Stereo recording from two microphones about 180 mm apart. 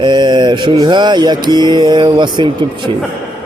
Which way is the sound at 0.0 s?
25° right (ahead or behind).